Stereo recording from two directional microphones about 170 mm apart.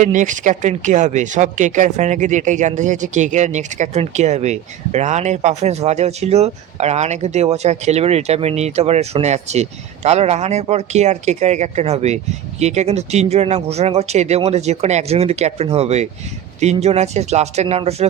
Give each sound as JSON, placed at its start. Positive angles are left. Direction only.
{"t": 0.0, "sound": "speech", "side_deg": -45}